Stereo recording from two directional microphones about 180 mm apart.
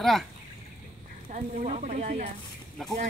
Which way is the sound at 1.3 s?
40° right (ahead or behind).